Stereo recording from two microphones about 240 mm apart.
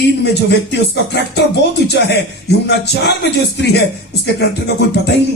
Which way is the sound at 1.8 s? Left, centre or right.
Left.